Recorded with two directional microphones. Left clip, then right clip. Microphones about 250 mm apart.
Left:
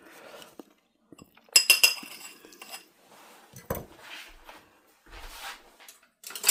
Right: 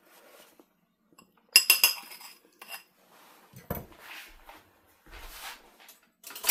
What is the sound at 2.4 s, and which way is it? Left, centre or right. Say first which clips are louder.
Cutlery: left 11 dB; left.